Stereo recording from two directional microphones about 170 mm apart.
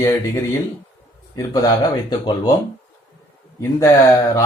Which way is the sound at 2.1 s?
25° left (ahead or behind).